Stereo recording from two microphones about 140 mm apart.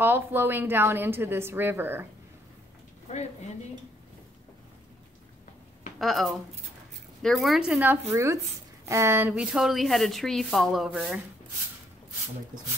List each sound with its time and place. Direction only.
0.0 s a woman's voice: 15° right (ahead or behind)
5.9 s a woman's voice: centre (ahead or behind)
8.1 s a woman's voice: 20° right (ahead or behind); by 11.1 s centre (ahead or behind)